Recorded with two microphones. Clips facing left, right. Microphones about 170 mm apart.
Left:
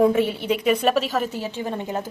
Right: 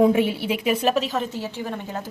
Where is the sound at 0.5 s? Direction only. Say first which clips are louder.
Left 3 dB; 5° right (ahead or behind).